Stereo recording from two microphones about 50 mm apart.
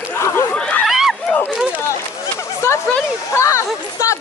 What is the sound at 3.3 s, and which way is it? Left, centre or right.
Speech, left.